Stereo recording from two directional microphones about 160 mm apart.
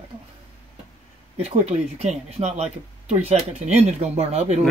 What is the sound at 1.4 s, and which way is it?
Speech, 40° right (ahead or behind).